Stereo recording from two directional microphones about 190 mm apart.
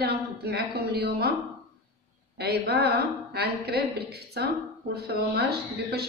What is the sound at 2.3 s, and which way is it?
A woman's voice, 60° right (ahead or behind).